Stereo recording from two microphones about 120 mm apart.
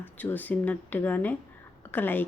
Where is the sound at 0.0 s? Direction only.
15° left (ahead or behind).